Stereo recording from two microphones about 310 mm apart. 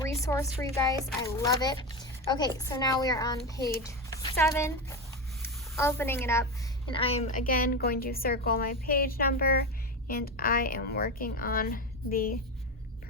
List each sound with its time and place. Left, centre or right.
0.0 s a woman's voice: centre; by 12.3 s left